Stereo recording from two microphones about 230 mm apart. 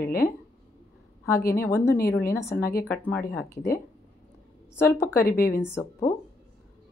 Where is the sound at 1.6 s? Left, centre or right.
Centre.